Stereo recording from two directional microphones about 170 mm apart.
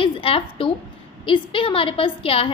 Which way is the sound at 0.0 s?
35° left (ahead or behind).